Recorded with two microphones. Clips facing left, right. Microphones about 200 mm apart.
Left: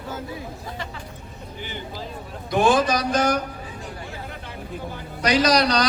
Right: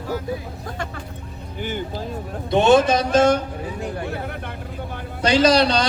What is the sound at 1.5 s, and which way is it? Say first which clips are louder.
Speech: right 7 dB; 50° right (ahead or behind).